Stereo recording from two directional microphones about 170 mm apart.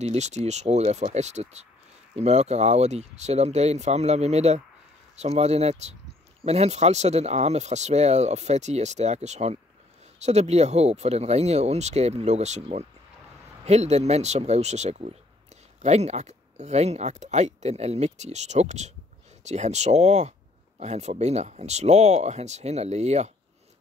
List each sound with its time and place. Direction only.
0.0 s speech: 40° right (ahead or behind)